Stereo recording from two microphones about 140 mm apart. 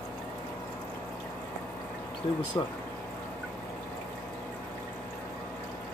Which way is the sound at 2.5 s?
20° left (ahead or behind).